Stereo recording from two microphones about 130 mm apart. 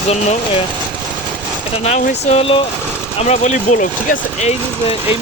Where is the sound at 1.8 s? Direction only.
55° left (ahead or behind).